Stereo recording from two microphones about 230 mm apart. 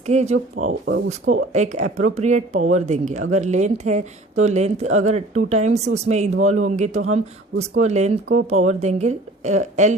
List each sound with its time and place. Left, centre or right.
0.0 s a woman's voice: right
0.9 s speech: right
1.5 s a woman's voice: right